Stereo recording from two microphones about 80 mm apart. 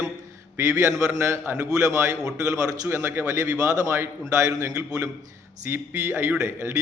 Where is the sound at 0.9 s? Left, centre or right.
Right.